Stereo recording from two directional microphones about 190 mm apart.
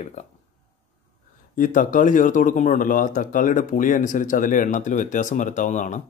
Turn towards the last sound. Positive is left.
turn(degrees=40)  # may be behind; listen again after turning